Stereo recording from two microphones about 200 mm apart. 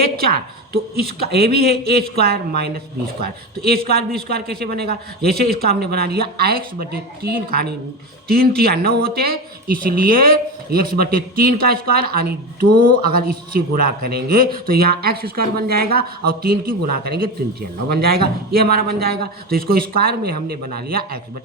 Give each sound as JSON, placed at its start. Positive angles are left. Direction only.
{"t": 0.2, "sound": "a woman's voice", "side_deg": -50}